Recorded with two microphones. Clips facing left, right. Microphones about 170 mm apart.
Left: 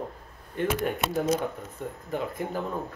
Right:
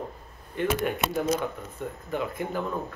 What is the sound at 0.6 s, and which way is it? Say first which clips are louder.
Speech: right 1 dB; 40° left (ahead or behind).